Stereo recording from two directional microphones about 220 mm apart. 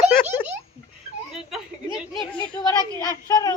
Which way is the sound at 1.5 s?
Centre (ahead or behind).